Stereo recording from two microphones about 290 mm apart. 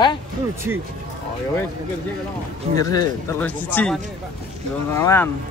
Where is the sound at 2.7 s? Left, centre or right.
Centre.